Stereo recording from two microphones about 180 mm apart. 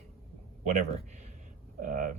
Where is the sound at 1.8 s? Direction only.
50° right (ahead or behind).